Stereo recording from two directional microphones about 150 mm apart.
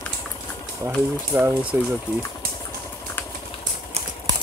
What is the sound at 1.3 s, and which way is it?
Speech, 15° right (ahead or behind).